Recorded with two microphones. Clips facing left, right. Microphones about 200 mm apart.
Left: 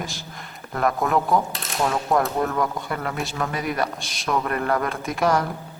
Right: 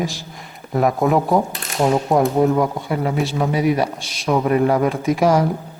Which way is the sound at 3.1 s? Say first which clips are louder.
Right 7 dB; centre (ahead or behind).